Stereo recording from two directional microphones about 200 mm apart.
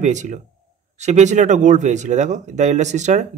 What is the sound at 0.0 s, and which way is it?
Speech, 35° right (ahead or behind).